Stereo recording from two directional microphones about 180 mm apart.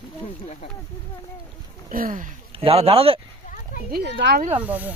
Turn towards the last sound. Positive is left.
turn(degrees=-10)  # may be behind; listen again after turning